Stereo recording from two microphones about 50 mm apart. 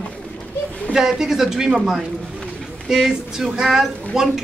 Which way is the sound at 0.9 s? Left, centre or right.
Centre.